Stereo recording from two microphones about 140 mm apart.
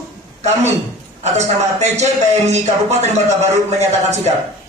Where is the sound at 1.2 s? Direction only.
55° right (ahead or behind).